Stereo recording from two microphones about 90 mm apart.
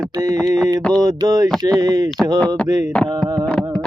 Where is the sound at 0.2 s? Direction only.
40° right (ahead or behind).